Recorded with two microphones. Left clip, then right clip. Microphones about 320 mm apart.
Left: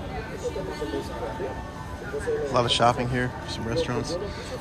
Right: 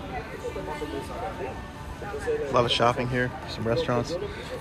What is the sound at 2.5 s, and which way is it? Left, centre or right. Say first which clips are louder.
Speech: left 1 dB; centre.